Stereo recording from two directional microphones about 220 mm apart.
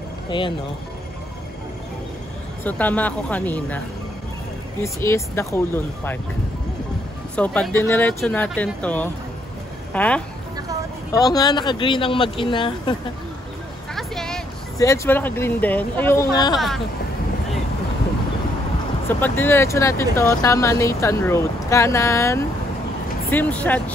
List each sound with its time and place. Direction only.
0.3 s speech: 20° left (ahead or behind)
2.6 s speech: 5° left (ahead or behind)
4.8 s speech: 10° left (ahead or behind)
7.3 s speech: 5° left (ahead or behind)
11.1 s speech: 15° left (ahead or behind)
13.9 s a sound: centre (ahead or behind)
14.8 s speech: 10° left (ahead or behind)
16.5 s speech: centre (ahead or behind)
19.0 s speech: 10° left (ahead or behind)